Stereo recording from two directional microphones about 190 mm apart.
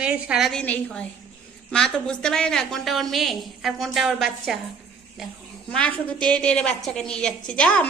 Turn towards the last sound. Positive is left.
turn(degrees=5)  # may be behind; listen again after turning